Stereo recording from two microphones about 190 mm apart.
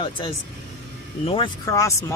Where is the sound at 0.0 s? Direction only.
25° left (ahead or behind).